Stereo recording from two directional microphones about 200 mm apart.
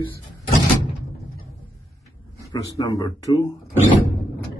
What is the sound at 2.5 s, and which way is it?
Speech, 20° left (ahead or behind).